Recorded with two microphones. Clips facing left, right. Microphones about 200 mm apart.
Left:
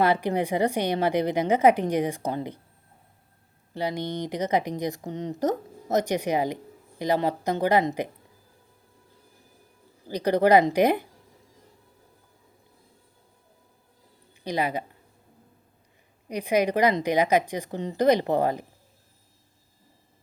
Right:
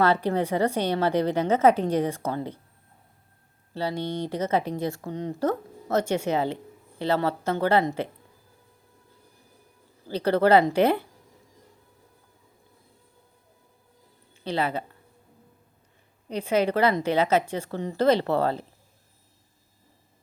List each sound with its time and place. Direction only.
0.0 s speech: 15° left (ahead or behind)
3.8 s speech: 15° left (ahead or behind)
10.1 s speech: 15° left (ahead or behind)
14.4 s speech: 15° left (ahead or behind)
16.3 s speech: 15° left (ahead or behind)